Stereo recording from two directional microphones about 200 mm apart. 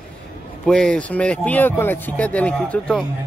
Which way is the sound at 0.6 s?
5° left (ahead or behind).